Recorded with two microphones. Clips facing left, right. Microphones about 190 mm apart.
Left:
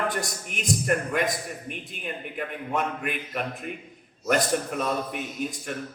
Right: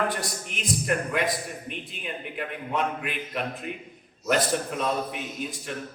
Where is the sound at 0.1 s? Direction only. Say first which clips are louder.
Left 1 dB; 45° left (ahead or behind).